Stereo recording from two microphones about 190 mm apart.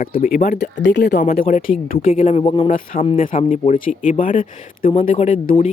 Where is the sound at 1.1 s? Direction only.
40° left (ahead or behind).